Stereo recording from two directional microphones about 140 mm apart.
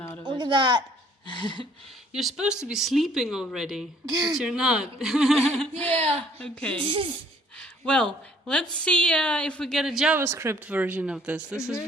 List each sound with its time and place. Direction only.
0.0 s a sound: 20° left (ahead or behind)
0.3 s speech: 35° right (ahead or behind)
1.3 s a sound: 35° left (ahead or behind)
2.1 s speech: centre (ahead or behind)
4.1 s a woman's voice: 30° right (ahead or behind)
4.4 s speech: 5° right (ahead or behind)
6.0 s speech: 45° right (ahead or behind)
6.4 s a woman's voice: 5° left (ahead or behind)
6.7 s speech: 40° right (ahead or behind)
7.6 s a woman's voice: 5° left (ahead or behind)
10.2 s speech: 20° right (ahead or behind)